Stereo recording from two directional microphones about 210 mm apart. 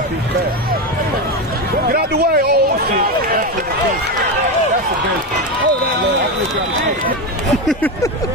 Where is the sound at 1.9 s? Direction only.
45° right (ahead or behind).